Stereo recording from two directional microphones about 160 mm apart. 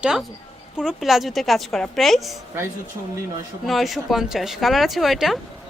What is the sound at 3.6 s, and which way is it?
A woman's voice, centre (ahead or behind).